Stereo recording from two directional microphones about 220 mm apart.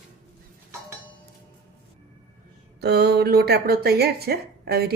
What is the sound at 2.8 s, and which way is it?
A woman's voice, 45° right (ahead or behind).